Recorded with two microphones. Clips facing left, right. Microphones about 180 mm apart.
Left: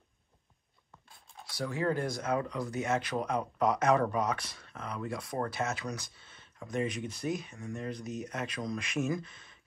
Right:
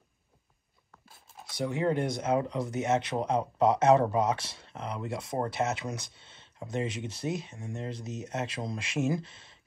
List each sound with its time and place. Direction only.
1.0 s writing: 5° right (ahead or behind)
1.4 s speech: 20° right (ahead or behind)